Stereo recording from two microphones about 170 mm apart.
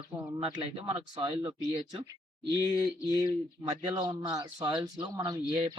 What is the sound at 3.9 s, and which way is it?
Speech, 25° right (ahead or behind).